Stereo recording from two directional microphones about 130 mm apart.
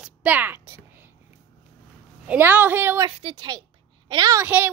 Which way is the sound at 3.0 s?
45° right (ahead or behind).